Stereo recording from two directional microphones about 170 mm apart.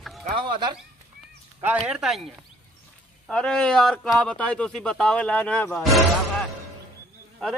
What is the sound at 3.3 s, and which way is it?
A man's voice, 5° left (ahead or behind).